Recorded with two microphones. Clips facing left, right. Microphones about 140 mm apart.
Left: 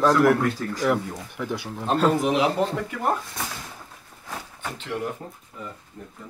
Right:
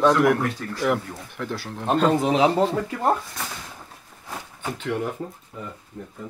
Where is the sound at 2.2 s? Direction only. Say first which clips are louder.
Right 2 dB; 30° right (ahead or behind).